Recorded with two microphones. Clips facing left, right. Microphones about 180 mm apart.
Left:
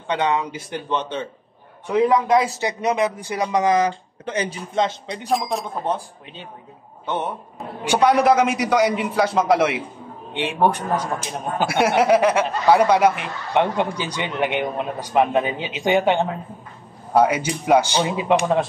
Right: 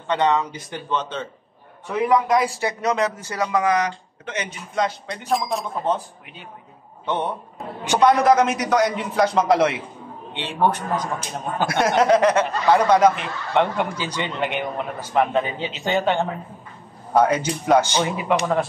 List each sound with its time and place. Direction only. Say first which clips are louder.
0.1 s speech: right 1 dB; 15° left (ahead or behind)
3.5 s speech: left 3 dB; 30° left (ahead or behind)
5.5 s speech: even; centre (ahead or behind)
7.8 s speech: even; 10° left (ahead or behind)